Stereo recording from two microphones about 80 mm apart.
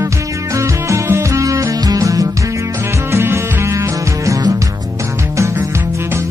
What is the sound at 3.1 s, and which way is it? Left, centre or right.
Music, right.